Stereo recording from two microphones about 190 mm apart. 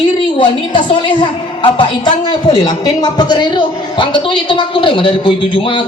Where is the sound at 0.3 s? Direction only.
25° left (ahead or behind).